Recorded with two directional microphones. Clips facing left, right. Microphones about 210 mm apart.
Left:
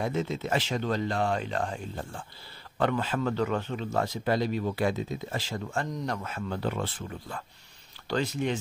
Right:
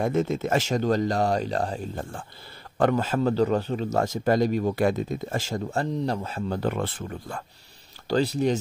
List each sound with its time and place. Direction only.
0.0 s speech: 50° right (ahead or behind); by 6.6 s 30° right (ahead or behind)
6.6 s speech: 50° right (ahead or behind)
8.1 s speech: 35° right (ahead or behind)